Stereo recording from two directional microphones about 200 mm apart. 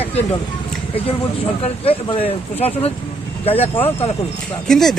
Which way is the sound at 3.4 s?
30° left (ahead or behind).